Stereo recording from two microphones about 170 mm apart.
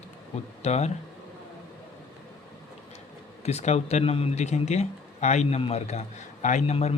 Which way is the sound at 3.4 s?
40° left (ahead or behind).